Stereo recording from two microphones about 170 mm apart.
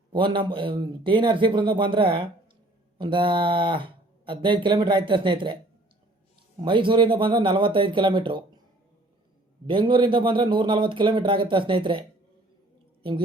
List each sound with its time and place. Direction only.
0.1 s speech: 30° right (ahead or behind)
6.7 s speech: 30° right (ahead or behind)
9.6 s speech: 30° right (ahead or behind)